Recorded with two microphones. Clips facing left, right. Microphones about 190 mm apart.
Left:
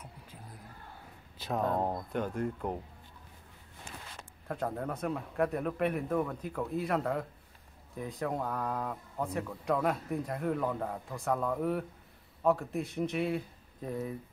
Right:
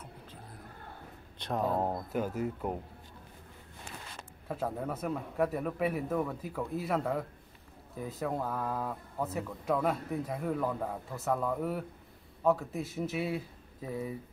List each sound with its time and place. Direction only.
1.4 s speech: centre (ahead or behind)
4.5 s speech: 5° right (ahead or behind)